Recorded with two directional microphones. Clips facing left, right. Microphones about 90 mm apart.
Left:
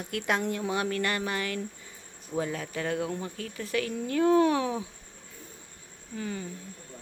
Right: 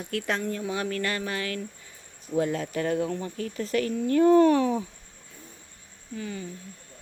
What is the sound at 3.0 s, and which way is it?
Speech, 15° left (ahead or behind).